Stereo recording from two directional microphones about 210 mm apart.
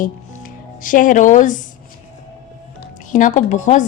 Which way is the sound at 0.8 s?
40° left (ahead or behind).